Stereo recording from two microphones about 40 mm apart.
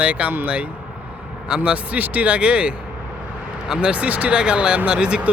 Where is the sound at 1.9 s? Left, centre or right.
Right.